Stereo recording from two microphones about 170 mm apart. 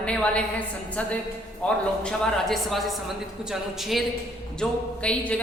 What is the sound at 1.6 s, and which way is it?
A woman's voice, 5° left (ahead or behind).